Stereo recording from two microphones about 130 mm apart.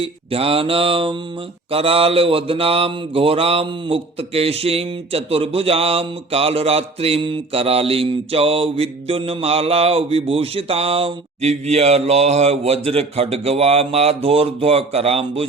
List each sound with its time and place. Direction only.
0.0 s mantra: 45° right (ahead or behind)